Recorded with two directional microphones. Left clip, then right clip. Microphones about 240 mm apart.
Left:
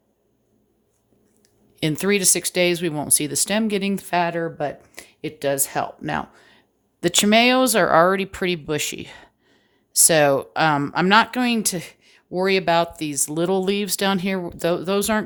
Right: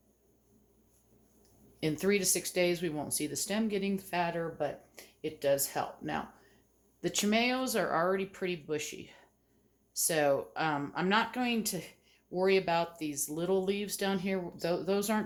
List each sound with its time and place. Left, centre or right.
1.4 s speech: left